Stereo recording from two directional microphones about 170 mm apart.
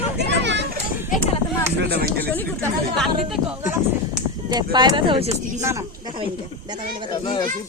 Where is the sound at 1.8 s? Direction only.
70° right (ahead or behind).